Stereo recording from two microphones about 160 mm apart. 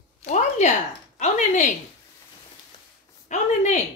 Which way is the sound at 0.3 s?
45° left (ahead or behind).